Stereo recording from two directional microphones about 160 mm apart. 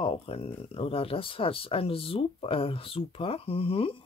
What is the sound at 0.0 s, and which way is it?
Speech, 35° left (ahead or behind).